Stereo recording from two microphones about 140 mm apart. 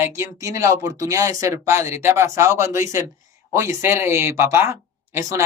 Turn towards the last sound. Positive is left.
turn(degrees=-20)  # may be behind; listen again after turning